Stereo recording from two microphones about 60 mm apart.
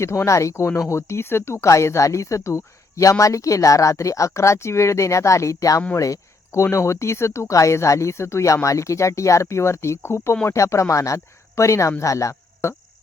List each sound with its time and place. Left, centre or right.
0.0 s speech: left
6.0 s speech: left